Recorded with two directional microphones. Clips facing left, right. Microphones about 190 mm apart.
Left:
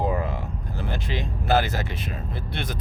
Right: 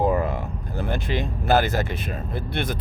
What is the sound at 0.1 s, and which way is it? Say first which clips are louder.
Speech: right 4 dB; 55° right (ahead or behind).